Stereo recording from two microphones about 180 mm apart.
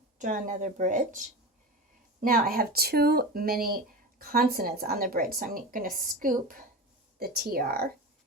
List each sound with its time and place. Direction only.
0.2 s a woman's voice: 45° right (ahead or behind)
2.2 s a woman's voice: 55° right (ahead or behind)